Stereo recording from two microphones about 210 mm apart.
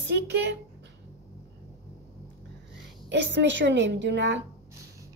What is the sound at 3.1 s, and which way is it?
A woman's voice, 60° right (ahead or behind).